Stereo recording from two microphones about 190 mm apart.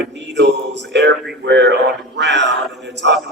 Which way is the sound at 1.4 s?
65° right (ahead or behind).